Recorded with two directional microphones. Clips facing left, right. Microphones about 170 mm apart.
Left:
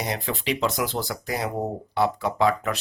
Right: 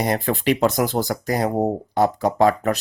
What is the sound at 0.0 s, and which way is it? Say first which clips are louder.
Speech: right 8 dB; 50° right (ahead or behind).